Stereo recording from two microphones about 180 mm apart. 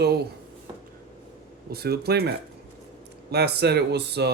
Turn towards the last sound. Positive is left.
turn(degrees=-65)  # may be behind; listen again after turning